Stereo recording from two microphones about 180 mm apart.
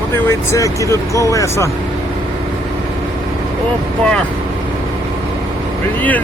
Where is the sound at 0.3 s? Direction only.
15° left (ahead or behind).